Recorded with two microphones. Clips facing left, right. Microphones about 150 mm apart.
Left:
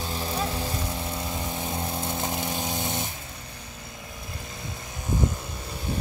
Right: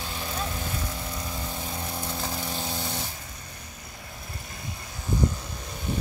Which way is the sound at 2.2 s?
20° left (ahead or behind).